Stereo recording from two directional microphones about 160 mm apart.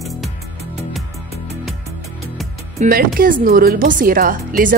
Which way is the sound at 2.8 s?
60° right (ahead or behind).